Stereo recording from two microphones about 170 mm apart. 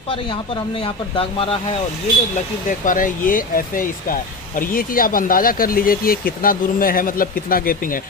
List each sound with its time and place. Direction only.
0.1 s speech: 30° left (ahead or behind)
2.7 s speech: 50° left (ahead or behind)